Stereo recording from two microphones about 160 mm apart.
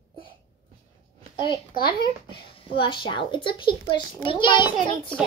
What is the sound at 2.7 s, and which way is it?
A child's voice, 30° left (ahead or behind).